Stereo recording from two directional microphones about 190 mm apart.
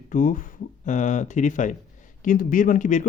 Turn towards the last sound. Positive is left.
turn(degrees=40)  # may be behind; listen again after turning